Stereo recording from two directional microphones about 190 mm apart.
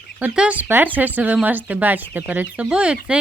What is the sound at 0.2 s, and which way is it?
Speech, 5° right (ahead or behind).